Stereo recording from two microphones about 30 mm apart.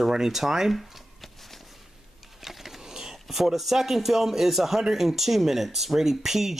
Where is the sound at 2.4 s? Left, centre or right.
Centre.